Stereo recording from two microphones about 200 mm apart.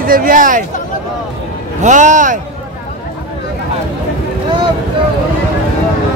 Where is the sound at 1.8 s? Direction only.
40° right (ahead or behind).